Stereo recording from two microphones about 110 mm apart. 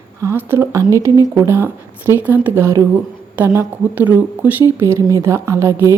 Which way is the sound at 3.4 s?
15° right (ahead or behind).